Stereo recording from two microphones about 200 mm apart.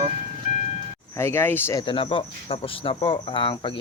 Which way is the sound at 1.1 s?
10° left (ahead or behind).